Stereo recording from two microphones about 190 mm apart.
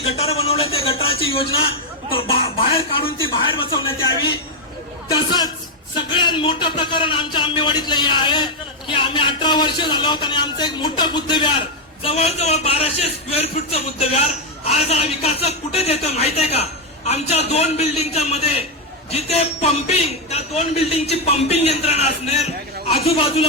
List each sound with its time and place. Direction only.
0.0 s a sound: 30° left (ahead or behind)
2.0 s a man's voice: 30° left (ahead or behind)
6.2 s a man's voice: 25° left (ahead or behind)